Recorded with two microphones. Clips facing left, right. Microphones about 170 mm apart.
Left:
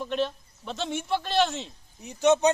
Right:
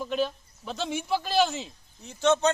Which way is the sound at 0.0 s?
Centre (ahead or behind).